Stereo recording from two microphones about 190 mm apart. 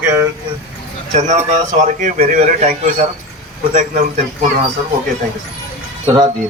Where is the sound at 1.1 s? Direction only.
35° right (ahead or behind).